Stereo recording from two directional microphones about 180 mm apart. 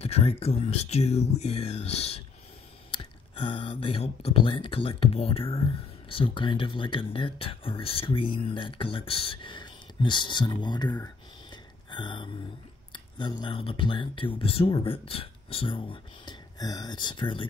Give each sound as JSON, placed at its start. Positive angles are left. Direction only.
{"t": 0.0, "sound": "speech", "side_deg": 35}
{"t": 11.5, "sound": "a sound", "side_deg": 25}
{"t": 12.9, "sound": "speech", "side_deg": 25}